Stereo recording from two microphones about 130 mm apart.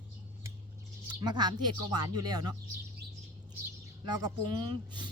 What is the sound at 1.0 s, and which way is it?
Speech, 35° right (ahead or behind).